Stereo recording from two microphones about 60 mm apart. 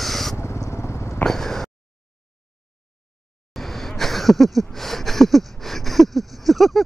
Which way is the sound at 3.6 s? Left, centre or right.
Centre.